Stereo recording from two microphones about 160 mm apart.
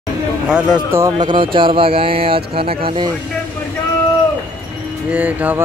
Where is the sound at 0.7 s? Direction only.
20° right (ahead or behind).